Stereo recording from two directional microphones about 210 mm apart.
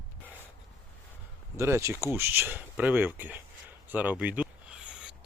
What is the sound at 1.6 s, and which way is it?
Speech, 15° right (ahead or behind).